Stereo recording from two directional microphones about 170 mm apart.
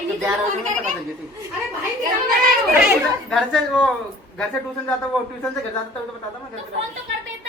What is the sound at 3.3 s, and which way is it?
Speech, centre (ahead or behind).